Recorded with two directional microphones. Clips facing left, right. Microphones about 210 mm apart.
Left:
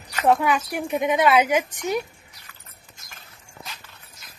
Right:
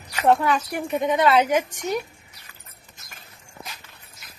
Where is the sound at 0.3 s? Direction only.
5° left (ahead or behind).